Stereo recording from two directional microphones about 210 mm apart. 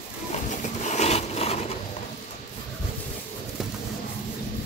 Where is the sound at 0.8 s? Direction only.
35° left (ahead or behind).